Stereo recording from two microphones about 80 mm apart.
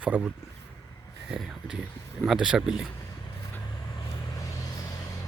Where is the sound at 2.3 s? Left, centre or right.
Centre.